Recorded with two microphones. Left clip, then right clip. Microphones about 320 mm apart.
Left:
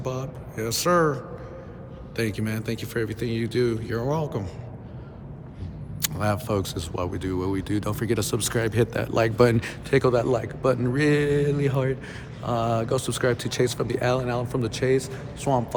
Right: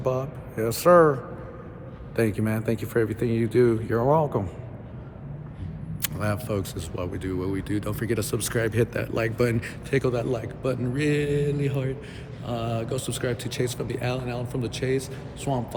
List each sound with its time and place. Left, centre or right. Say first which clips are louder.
0.0 s speech: right 5 dB; centre
6.0 s speech: left 3 dB; centre